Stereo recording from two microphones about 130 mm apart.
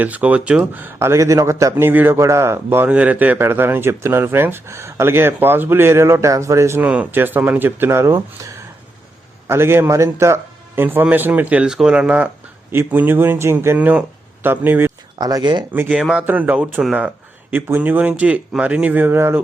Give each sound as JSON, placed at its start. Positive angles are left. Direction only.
{"t": 0.0, "sound": "speech", "side_deg": -10}
{"t": 9.5, "sound": "speech", "side_deg": -20}
{"t": 15.2, "sound": "speech", "side_deg": -30}
{"t": 15.7, "sound": "speech", "side_deg": -10}